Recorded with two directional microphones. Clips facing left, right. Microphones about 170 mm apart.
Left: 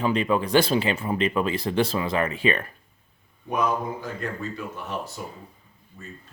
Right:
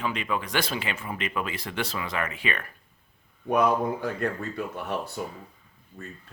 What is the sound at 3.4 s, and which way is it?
Speech, 60° right (ahead or behind).